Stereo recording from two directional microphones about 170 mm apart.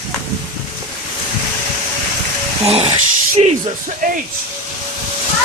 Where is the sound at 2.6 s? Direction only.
35° right (ahead or behind).